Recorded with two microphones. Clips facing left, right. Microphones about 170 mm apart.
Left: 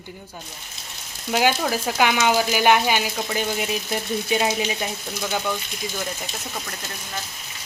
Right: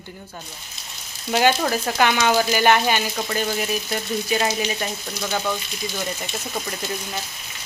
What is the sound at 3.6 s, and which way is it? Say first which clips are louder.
A woman's voice: even; 20° left (ahead or behind).